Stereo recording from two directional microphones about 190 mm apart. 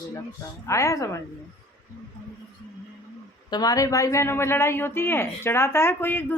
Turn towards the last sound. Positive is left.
turn(degrees=10)  # may be behind; listen again after turning